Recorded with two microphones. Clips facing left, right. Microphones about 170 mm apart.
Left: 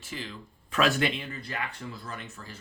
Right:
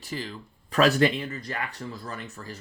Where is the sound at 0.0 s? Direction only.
40° right (ahead or behind).